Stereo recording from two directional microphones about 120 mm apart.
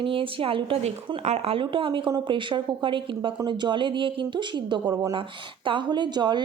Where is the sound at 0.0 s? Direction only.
45° right (ahead or behind).